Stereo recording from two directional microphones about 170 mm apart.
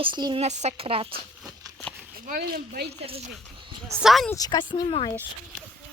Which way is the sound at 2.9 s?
35° right (ahead or behind).